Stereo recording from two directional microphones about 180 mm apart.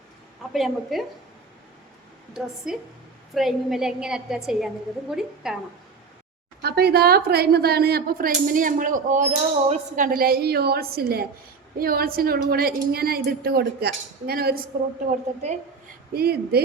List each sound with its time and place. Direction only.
0.5 s a woman's voice: centre (ahead or behind)
2.7 s a woman's voice: 5° right (ahead or behind)
6.6 s a woman's voice: 60° right (ahead or behind)
16.1 s a woman's voice: 60° right (ahead or behind)